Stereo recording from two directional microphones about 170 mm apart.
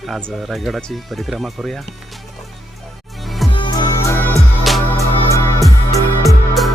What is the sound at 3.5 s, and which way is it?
Music, 25° left (ahead or behind).